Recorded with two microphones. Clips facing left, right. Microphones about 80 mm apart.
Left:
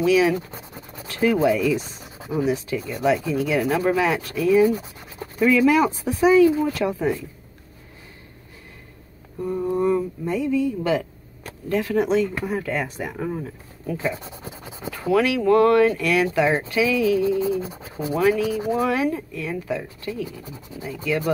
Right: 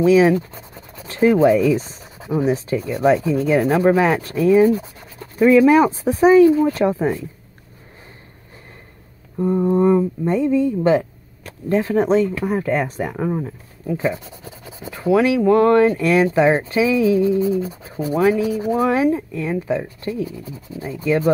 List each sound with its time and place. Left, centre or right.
0.0 s speech: right
1.8 s a sound: centre
2.4 s speech: right
9.4 s speech: right
14.4 s speech: left
15.0 s speech: right